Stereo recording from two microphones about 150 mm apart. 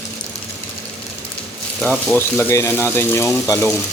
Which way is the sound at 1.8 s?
5° left (ahead or behind).